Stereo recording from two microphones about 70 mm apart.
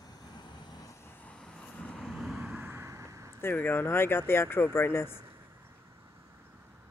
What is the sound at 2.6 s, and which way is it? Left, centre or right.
Vehicle, right.